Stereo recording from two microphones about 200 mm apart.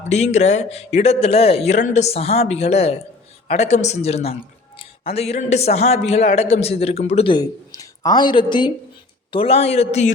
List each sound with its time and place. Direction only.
0.1 s a man's voice: 35° left (ahead or behind)